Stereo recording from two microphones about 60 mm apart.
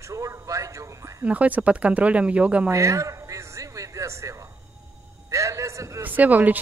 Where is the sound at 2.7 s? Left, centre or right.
Right.